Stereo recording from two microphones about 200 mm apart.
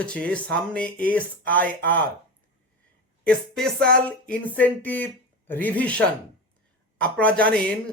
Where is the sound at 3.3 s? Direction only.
5° left (ahead or behind).